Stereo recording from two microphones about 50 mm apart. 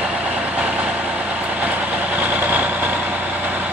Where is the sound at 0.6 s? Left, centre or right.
Right.